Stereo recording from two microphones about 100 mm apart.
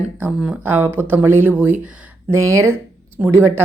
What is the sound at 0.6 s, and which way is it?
Speech, 20° right (ahead or behind).